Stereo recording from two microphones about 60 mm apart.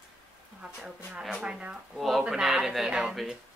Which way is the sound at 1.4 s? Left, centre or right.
Centre.